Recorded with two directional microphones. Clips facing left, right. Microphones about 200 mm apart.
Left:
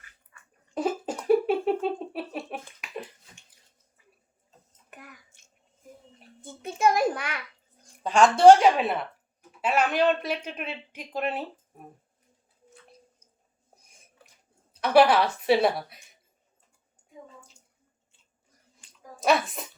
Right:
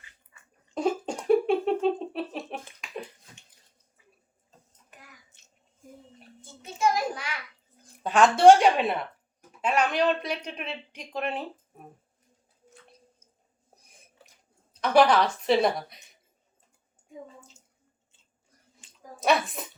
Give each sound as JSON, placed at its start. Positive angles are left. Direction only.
{"t": 0.7, "sound": "a sound", "side_deg": 5}
{"t": 4.9, "sound": "bathtub", "side_deg": 55}
{"t": 6.4, "sound": "a sound", "side_deg": 55}
{"t": 8.0, "sound": "speech", "side_deg": 0}
{"t": 14.7, "sound": "a woman's voice", "side_deg": 5}
{"t": 19.2, "sound": "speech", "side_deg": 0}